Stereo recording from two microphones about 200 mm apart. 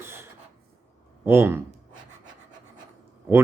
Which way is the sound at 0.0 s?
10° right (ahead or behind).